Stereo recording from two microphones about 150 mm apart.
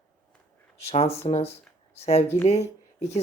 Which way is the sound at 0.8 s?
40° left (ahead or behind).